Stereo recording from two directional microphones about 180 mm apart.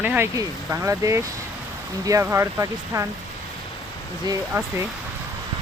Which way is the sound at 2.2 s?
15° right (ahead or behind).